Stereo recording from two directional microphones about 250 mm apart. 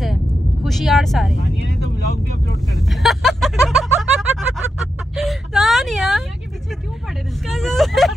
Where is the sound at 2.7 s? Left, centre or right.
Centre.